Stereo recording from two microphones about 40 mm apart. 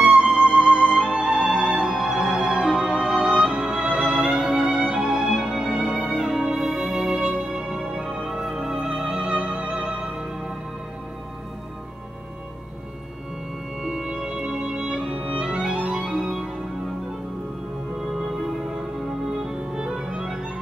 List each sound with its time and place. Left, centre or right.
0.0 s music: right
9.0 s music: right
13.8 s music: centre
16.2 s organ: centre
18.9 s music: centre